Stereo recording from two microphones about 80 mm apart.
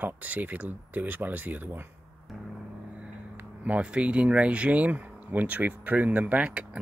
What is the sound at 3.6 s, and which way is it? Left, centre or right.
Speech, centre.